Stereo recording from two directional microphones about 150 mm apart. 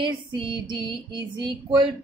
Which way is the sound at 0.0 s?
35° right (ahead or behind).